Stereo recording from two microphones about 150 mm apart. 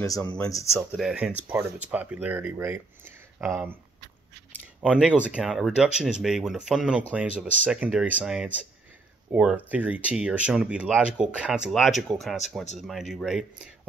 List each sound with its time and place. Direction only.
0.0 s speech: 20° left (ahead or behind)
0.7 s speech: 5° right (ahead or behind)
4.5 s a sound: 5° right (ahead or behind)
5.3 s speech: 5° right (ahead or behind)